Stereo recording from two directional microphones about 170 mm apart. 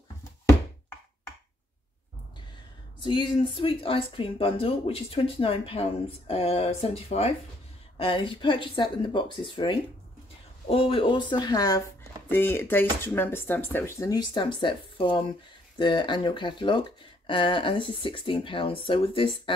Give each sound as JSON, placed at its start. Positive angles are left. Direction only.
{"t": 3.0, "sound": "speech", "side_deg": 30}